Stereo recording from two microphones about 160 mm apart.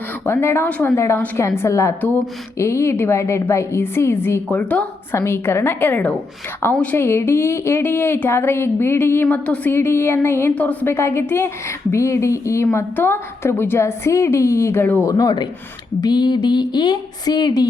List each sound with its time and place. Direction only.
0.3 s speech: 15° left (ahead or behind)